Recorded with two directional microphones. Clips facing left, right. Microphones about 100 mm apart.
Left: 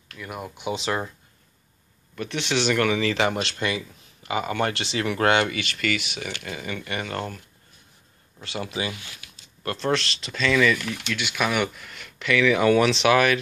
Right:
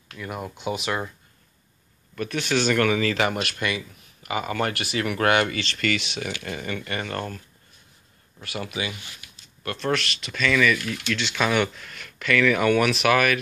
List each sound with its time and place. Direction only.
0.2 s speech: 10° left (ahead or behind)
0.7 s speech: 30° left (ahead or behind)
2.1 s speech: 20° left (ahead or behind)
8.4 s speech: 25° left (ahead or behind)
11.1 s speech: 10° left (ahead or behind); by 13.4 s 25° left (ahead or behind)